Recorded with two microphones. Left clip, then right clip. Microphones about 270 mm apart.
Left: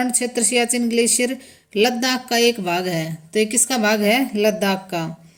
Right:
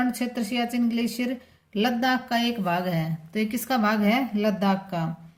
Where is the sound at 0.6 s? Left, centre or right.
Right.